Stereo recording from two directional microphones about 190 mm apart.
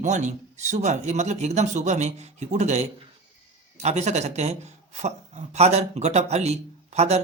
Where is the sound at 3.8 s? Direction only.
35° right (ahead or behind).